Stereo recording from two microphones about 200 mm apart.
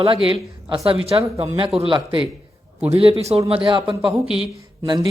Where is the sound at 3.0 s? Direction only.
30° right (ahead or behind).